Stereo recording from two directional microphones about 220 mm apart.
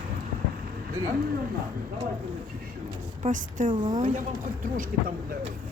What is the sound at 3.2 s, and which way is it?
Speech, 35° right (ahead or behind).